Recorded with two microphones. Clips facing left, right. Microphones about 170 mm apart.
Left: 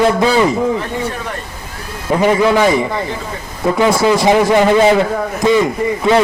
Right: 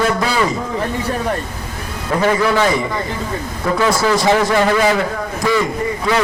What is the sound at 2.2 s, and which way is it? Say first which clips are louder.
Speech: left 4 dB; 20° left (ahead or behind).